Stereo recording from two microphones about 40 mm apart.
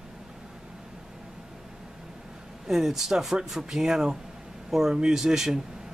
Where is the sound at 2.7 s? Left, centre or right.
Centre.